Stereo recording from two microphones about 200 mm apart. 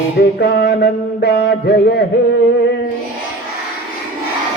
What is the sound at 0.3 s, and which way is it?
Mantra, 55° left (ahead or behind).